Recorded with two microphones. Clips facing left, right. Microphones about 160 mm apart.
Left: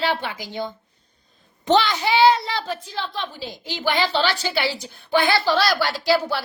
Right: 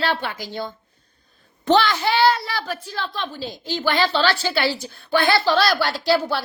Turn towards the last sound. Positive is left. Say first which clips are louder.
# even
turn(degrees=10)  # may be behind; listen again after turning